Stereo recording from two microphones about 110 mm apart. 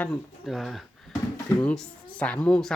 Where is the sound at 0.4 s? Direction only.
Centre (ahead or behind).